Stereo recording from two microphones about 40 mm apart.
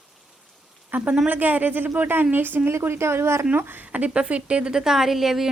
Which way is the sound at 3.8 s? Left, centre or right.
Right.